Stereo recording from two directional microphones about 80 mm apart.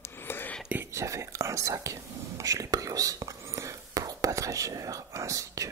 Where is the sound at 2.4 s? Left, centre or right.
Right.